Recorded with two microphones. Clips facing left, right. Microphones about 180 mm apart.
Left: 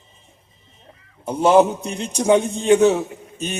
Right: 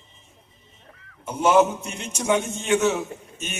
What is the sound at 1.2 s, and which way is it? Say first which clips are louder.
Speech: left 4 dB; 35° left (ahead or behind).